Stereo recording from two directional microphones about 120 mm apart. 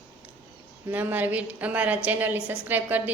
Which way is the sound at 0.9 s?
15° right (ahead or behind).